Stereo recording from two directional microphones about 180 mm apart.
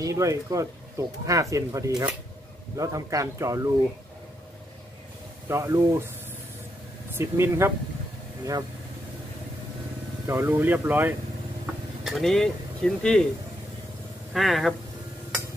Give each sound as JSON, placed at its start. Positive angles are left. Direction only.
{"t": 0.0, "sound": "speech", "side_deg": -20}
{"t": 5.5, "sound": "speech", "side_deg": -15}
{"t": 7.2, "sound": "speech", "side_deg": -15}
{"t": 10.2, "sound": "speech", "side_deg": -15}
{"t": 12.0, "sound": "speech", "side_deg": 0}
{"t": 14.3, "sound": "speech", "side_deg": 0}